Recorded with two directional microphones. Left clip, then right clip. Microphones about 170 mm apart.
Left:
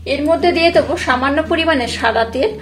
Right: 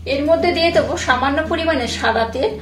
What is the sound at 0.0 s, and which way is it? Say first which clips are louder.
A woman's voice: left 1 dB; 25° left (ahead or behind).